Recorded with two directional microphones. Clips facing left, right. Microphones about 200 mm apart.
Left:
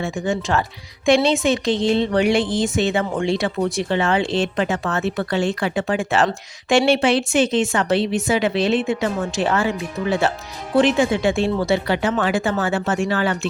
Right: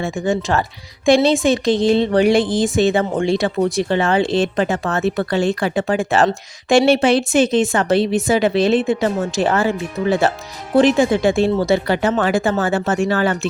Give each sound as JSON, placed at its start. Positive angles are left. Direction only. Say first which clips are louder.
{"t": 0.0, "sound": "speech", "louder": "right 3 dB", "side_deg": -35}